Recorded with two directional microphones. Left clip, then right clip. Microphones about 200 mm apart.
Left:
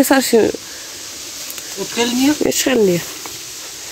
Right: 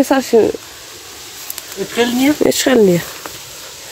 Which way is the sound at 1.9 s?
15° right (ahead or behind).